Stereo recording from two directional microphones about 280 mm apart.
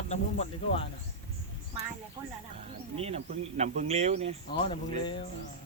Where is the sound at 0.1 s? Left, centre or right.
Left.